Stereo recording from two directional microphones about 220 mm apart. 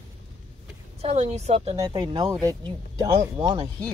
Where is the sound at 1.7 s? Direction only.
15° right (ahead or behind).